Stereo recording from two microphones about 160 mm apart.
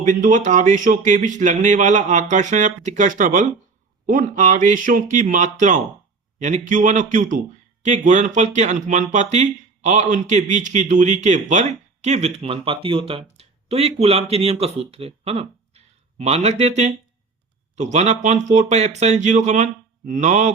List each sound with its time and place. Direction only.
0.0 s speech: 55° right (ahead or behind)